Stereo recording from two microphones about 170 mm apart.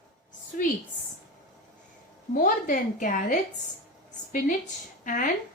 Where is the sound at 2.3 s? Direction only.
50° left (ahead or behind).